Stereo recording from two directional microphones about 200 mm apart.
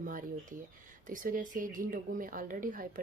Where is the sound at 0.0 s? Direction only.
45° right (ahead or behind).